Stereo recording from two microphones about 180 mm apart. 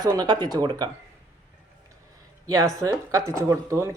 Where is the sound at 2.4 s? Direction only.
20° right (ahead or behind).